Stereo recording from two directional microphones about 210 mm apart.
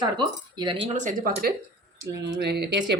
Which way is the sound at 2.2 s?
50° right (ahead or behind).